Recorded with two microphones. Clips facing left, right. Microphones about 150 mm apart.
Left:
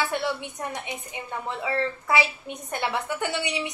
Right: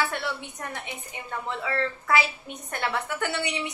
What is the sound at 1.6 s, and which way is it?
A woman's voice, 15° left (ahead or behind).